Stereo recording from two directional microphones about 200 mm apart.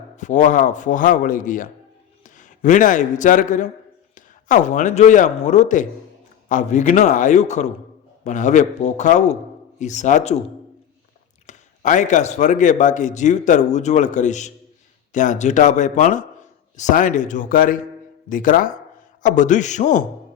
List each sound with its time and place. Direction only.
0.2 s a man's voice: 40° left (ahead or behind)
11.4 s a man's voice: 40° left (ahead or behind)